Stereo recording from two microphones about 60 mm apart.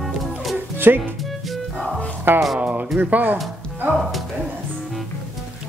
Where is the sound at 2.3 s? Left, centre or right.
Right.